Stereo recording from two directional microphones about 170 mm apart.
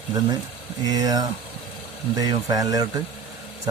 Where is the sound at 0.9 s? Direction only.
20° right (ahead or behind).